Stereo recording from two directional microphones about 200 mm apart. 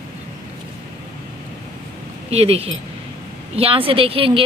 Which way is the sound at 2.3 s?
30° right (ahead or behind).